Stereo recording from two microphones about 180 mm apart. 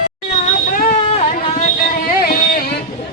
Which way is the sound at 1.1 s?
40° left (ahead or behind).